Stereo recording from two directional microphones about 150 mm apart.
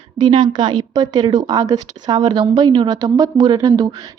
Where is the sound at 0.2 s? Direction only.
30° right (ahead or behind).